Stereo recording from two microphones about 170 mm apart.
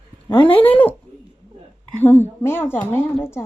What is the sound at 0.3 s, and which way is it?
Speech, 30° left (ahead or behind).